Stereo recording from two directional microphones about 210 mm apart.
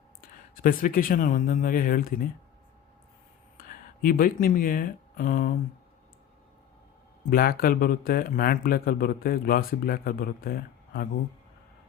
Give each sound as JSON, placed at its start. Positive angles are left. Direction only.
{"t": 0.2, "sound": "speech", "side_deg": 40}
{"t": 3.6, "sound": "speech", "side_deg": 40}
{"t": 7.3, "sound": "speech", "side_deg": 45}